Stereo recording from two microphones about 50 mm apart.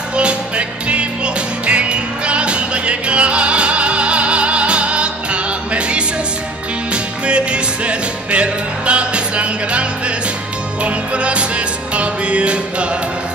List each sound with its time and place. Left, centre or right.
0.1 s music: right